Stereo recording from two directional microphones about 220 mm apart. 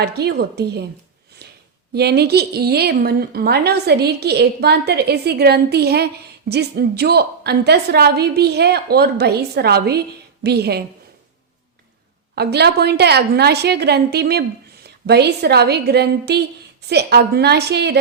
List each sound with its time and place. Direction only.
0.0 s a woman's voice: 45° right (ahead or behind)
1.4 s a sound: 50° right (ahead or behind)
1.9 s a woman's voice: 45° right (ahead or behind)
12.3 s a woman's voice: 50° right (ahead or behind)